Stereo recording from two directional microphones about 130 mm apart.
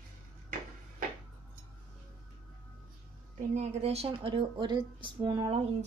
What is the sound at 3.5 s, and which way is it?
Speech, 55° right (ahead or behind).